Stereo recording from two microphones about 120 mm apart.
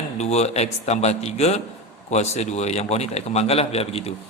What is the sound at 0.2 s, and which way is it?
A man's voice, 65° left (ahead or behind).